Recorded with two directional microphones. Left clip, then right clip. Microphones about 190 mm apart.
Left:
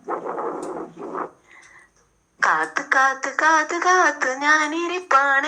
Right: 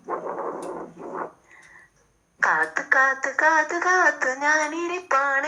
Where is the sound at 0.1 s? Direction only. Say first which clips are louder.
Left 3 dB; 40° left (ahead or behind).